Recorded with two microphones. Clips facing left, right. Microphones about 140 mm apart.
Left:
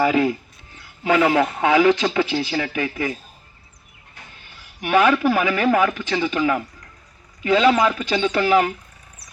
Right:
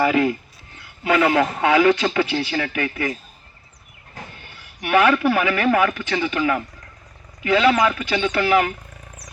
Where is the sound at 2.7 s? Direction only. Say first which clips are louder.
Even; 30° left (ahead or behind).